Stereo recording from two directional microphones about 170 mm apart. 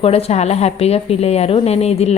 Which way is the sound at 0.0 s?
35° left (ahead or behind).